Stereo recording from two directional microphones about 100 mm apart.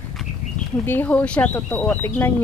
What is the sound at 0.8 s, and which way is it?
Speech, 20° left (ahead or behind).